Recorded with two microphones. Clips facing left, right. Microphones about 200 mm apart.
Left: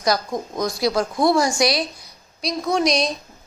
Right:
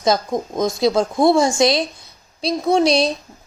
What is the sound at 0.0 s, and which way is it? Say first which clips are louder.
A woman's voice: right 3 dB; 25° right (ahead or behind).